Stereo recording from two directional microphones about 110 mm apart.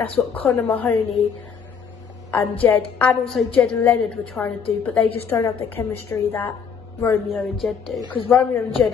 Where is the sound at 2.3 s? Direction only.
15° left (ahead or behind).